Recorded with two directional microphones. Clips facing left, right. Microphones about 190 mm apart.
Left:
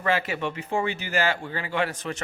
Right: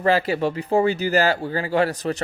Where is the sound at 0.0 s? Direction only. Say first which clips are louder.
Right 6 dB; 35° right (ahead or behind).